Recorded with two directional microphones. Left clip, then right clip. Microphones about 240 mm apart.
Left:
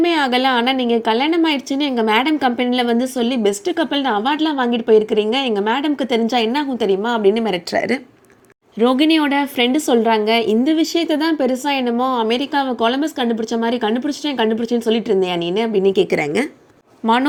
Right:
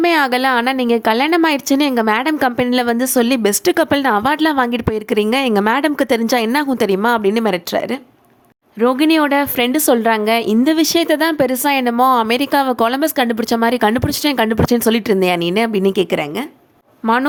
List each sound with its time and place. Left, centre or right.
0.0 s a woman's voice: right